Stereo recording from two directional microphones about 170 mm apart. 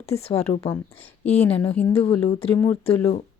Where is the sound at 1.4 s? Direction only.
10° left (ahead or behind).